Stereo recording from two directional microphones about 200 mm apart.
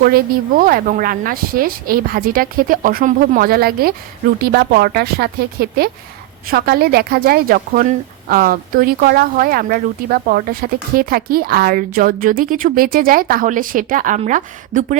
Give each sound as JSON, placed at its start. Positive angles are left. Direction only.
{"t": 0.6, "sound": "a woman's voice", "side_deg": -45}